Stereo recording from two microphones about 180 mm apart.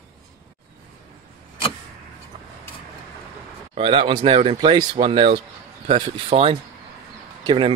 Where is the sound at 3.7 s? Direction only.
30° right (ahead or behind).